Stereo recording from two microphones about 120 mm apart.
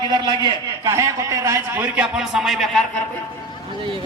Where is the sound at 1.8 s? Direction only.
10° right (ahead or behind).